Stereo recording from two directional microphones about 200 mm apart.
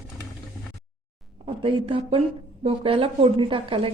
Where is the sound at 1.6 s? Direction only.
25° right (ahead or behind).